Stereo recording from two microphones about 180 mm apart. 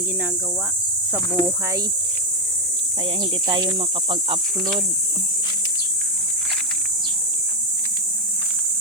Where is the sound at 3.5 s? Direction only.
25° right (ahead or behind).